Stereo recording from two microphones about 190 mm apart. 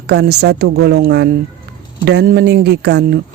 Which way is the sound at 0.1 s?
60° right (ahead or behind).